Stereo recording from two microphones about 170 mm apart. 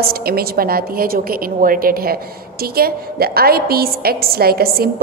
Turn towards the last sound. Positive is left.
turn(degrees=-65)  # may be behind; listen again after turning